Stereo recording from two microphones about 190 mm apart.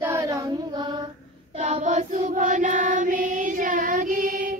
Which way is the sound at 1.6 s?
40° right (ahead or behind).